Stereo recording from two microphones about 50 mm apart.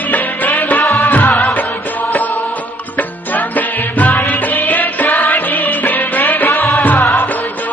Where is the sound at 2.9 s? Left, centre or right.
Left.